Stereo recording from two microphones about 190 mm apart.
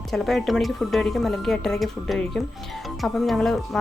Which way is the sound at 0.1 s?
Centre (ahead or behind).